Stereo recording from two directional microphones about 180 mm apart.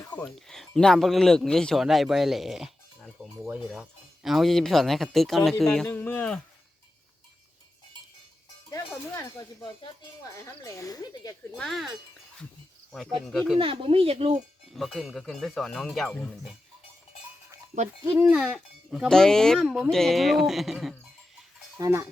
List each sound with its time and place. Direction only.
0.1 s speech: 5° left (ahead or behind)
3.3 s cowbell: 10° right (ahead or behind)
3.7 s speech: centre (ahead or behind)
8.7 s speech: 20° left (ahead or behind)
11.5 s speech: centre (ahead or behind)
13.2 s speech: centre (ahead or behind)
13.6 s speech: 30° right (ahead or behind)
14.7 s speech: centre (ahead or behind)
18.0 s speech: 10° right (ahead or behind)
21.8 s cowbell: 15° right (ahead or behind)